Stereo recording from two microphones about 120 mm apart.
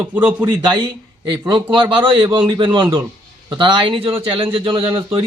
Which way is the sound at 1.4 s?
35° right (ahead or behind).